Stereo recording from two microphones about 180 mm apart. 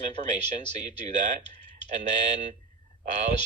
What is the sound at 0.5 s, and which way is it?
Speech, 40° right (ahead or behind).